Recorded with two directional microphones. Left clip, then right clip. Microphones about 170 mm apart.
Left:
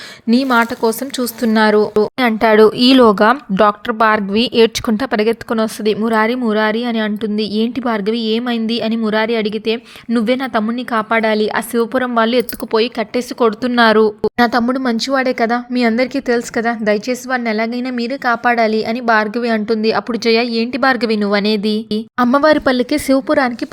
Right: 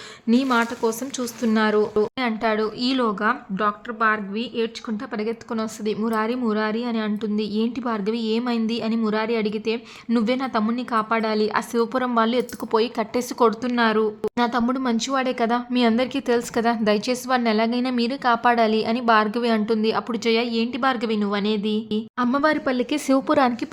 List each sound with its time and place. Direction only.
0.3 s speech: 35° left (ahead or behind); by 13.5 s 15° left (ahead or behind)
13.6 s speech: 30° left (ahead or behind); by 23.5 s 10° left (ahead or behind)